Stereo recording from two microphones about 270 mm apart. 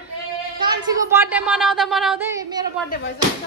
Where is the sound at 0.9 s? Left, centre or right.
Centre.